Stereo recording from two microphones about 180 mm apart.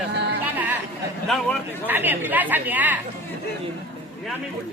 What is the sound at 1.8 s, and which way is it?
A woman's voice, 10° right (ahead or behind).